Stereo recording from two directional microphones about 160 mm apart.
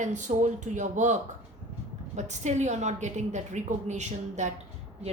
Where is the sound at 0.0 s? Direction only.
50° right (ahead or behind).